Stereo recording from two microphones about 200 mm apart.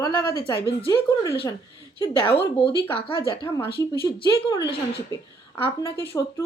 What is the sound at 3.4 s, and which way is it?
A woman's voice, 15° left (ahead or behind).